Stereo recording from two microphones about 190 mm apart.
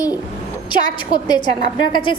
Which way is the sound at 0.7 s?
25° left (ahead or behind).